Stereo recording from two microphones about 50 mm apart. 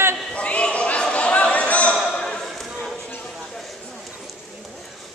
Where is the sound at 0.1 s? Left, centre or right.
Left.